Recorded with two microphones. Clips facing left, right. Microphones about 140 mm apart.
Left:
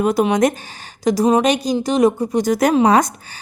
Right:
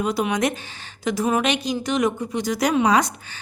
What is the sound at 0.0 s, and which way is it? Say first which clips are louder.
A woman's voice: left 7 dB; 45° left (ahead or behind).